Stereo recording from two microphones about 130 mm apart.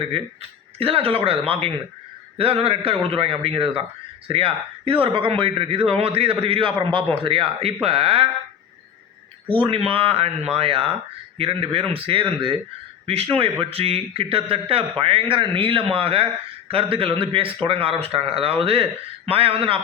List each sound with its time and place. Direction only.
0.8 s speech: 50° right (ahead or behind)
9.6 s speech: 45° right (ahead or behind)